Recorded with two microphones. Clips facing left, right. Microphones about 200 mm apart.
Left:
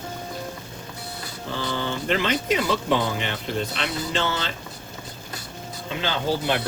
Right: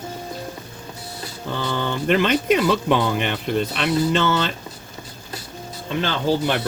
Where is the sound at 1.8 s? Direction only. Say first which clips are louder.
Right 6 dB; 55° right (ahead or behind).